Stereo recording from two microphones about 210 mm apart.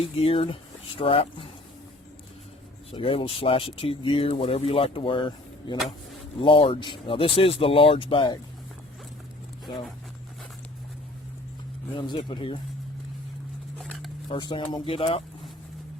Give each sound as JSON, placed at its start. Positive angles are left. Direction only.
{"t": 0.0, "sound": "speech", "side_deg": 25}
{"t": 2.9, "sound": "speech", "side_deg": 25}
{"t": 11.9, "sound": "speech", "side_deg": 25}
{"t": 13.7, "sound": "a sound", "side_deg": 5}
{"t": 14.3, "sound": "speech", "side_deg": 20}